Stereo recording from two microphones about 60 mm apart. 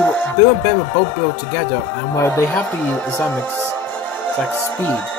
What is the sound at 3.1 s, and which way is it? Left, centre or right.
Speech, left.